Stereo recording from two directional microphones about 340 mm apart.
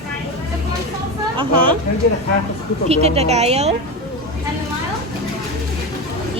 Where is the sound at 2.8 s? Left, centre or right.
Centre.